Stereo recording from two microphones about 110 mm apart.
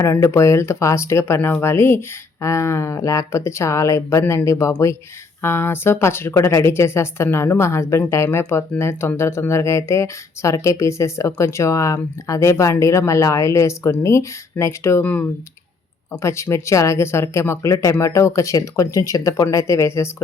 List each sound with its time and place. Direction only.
0.0 s speech: 25° left (ahead or behind)
15.0 s speech: 15° left (ahead or behind)
16.2 s speech: 25° left (ahead or behind)